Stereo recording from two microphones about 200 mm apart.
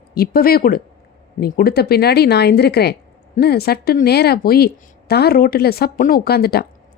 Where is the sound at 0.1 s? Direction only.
50° left (ahead or behind).